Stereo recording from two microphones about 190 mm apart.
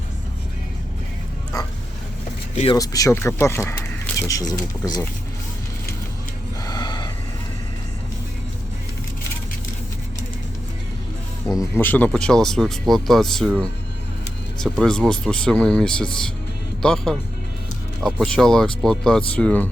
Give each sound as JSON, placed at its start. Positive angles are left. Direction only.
{"t": 2.7, "sound": "speech", "side_deg": 20}
{"t": 6.7, "sound": "a sound", "side_deg": 20}
{"t": 11.5, "sound": "speech", "side_deg": 10}